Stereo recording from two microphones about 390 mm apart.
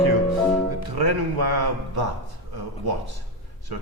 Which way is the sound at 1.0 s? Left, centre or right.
Right.